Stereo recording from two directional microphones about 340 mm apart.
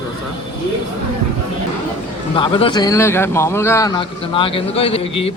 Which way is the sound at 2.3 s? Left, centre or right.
Centre.